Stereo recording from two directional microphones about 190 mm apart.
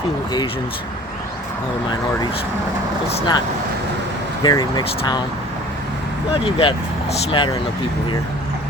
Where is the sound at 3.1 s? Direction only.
25° left (ahead or behind).